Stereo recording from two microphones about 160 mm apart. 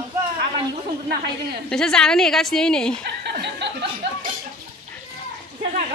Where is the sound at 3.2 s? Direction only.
90° right.